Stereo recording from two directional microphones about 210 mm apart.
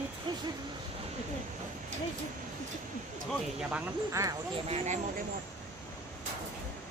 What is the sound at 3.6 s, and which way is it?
Speech, 10° right (ahead or behind).